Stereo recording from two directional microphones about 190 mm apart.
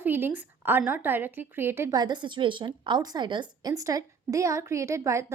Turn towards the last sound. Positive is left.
turn(degrees=-15)  # may be behind; listen again after turning